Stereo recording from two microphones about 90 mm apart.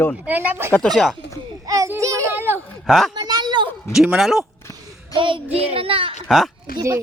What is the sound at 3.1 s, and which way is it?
Speech, 50° right (ahead or behind).